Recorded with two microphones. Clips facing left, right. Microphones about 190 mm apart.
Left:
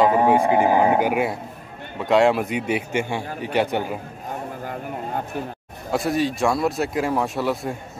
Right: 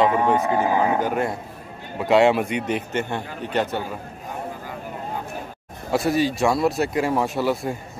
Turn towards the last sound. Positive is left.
turn(degrees=0)  # may be behind; listen again after turning